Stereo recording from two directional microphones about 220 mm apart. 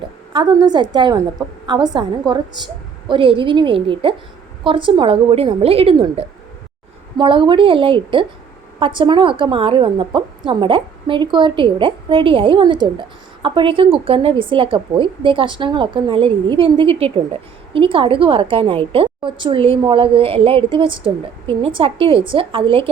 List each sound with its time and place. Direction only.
0.3 s a woman's voice: 20° right (ahead or behind)